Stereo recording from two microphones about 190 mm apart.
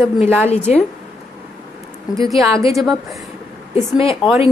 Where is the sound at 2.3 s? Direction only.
Centre (ahead or behind).